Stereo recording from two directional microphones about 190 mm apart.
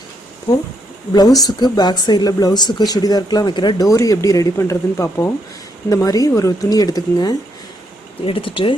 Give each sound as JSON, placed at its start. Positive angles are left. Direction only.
{"t": 1.1, "sound": "speech", "side_deg": 20}